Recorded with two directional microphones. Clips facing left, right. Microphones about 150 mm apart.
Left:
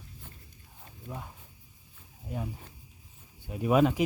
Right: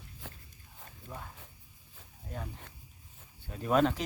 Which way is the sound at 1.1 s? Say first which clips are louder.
Left 4 dB; 15° left (ahead or behind).